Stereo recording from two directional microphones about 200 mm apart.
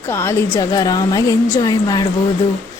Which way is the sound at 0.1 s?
15° left (ahead or behind).